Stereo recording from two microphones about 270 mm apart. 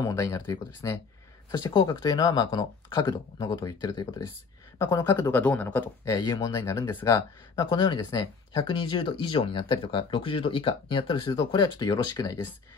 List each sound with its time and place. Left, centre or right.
0.0 s speech: centre